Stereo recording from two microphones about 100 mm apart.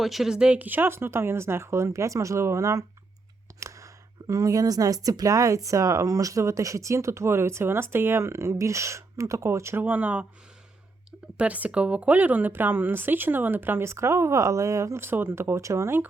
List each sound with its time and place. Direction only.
0.0 s speech: centre (ahead or behind); by 2.8 s 30° right (ahead or behind)
3.6 s a sound: 30° right (ahead or behind)
5.0 s speech: 35° right (ahead or behind); by 10.2 s 15° right (ahead or behind)
11.3 s speech: 15° right (ahead or behind)